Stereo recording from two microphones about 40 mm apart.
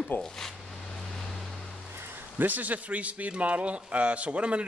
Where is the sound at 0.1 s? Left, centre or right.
Left.